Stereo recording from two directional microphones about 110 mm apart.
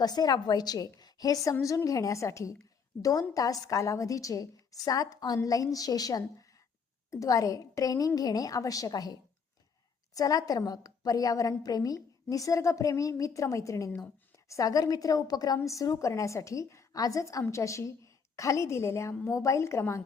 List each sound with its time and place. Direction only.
0.0 s a woman's voice: 35° left (ahead or behind)
10.2 s a woman's voice: 35° left (ahead or behind)